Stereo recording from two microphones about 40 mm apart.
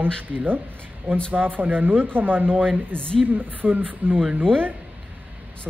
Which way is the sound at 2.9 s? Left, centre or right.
Left.